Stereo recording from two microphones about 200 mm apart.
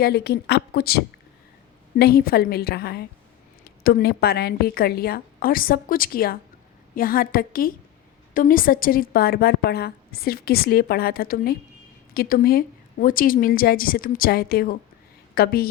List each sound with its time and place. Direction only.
0.0 s a woman's voice: 55° left (ahead or behind)